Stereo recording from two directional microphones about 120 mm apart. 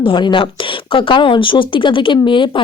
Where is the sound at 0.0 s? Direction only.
45° left (ahead or behind).